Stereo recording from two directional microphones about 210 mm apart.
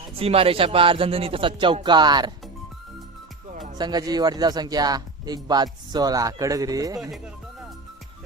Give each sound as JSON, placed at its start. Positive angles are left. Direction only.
{"t": 0.2, "sound": "a man's voice", "side_deg": -25}
{"t": 3.8, "sound": "a man's voice", "side_deg": -20}